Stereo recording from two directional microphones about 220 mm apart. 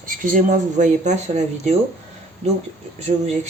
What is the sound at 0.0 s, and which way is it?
Speech, 40° right (ahead or behind).